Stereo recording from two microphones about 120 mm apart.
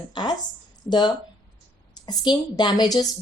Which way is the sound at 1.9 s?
35° left (ahead or behind).